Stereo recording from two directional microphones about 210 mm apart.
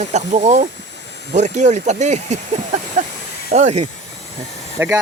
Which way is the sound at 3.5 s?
30° right (ahead or behind).